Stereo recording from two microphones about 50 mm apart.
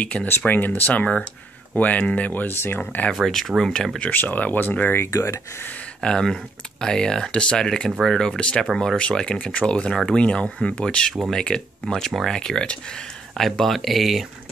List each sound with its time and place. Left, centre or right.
0.0 s speech: left
2.4 s speech: left
3.3 s speech: centre
4.1 s speech: left
5.1 s speech: left
5.9 s speech: centre
13.4 s speech: centre